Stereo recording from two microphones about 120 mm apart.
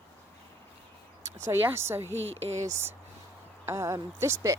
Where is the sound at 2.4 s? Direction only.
65° right (ahead or behind).